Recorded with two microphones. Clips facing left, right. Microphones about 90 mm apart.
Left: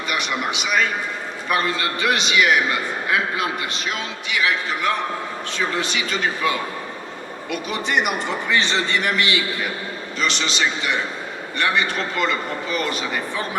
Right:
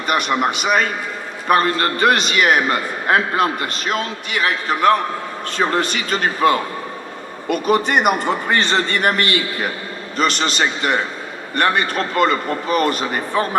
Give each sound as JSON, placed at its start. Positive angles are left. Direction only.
{"t": 0.1, "sound": "a man's voice", "side_deg": -50}